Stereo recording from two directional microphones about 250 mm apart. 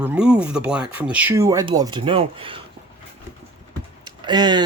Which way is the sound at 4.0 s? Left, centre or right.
Centre.